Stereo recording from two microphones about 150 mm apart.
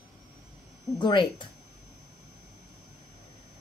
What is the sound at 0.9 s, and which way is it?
Speech, 30° left (ahead or behind).